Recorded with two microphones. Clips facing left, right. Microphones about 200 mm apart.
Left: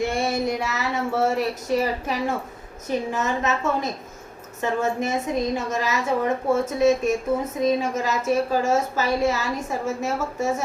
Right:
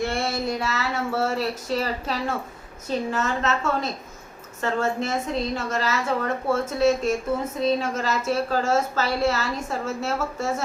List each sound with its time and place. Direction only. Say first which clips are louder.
0.0 s a woman's voice: left 2 dB; 15° left (ahead or behind)